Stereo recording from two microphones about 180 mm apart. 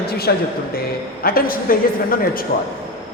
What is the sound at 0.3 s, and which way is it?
A man's voice, 65° left (ahead or behind).